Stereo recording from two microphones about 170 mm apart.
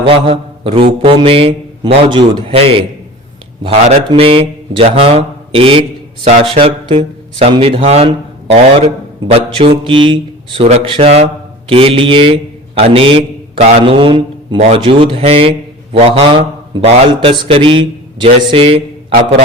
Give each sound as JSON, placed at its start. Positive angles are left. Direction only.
{"t": 0.0, "sound": "mantra", "side_deg": -30}
{"t": 1.0, "sound": "a man's voice", "side_deg": -35}